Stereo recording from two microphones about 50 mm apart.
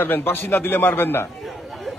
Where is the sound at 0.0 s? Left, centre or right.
Left.